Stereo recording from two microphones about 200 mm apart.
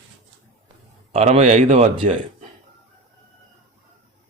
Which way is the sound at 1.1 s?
30° right (ahead or behind).